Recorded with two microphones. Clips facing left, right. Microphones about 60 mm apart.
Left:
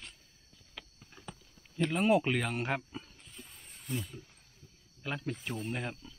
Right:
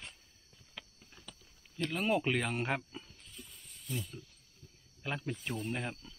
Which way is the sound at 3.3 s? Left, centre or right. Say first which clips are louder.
Left 1 dB; left.